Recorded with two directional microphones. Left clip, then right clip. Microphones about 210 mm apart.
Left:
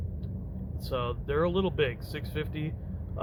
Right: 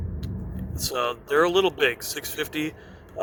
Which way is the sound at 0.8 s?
50° right (ahead or behind).